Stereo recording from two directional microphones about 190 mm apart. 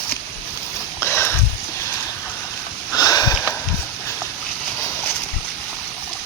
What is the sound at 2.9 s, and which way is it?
Sniff, 20° left (ahead or behind).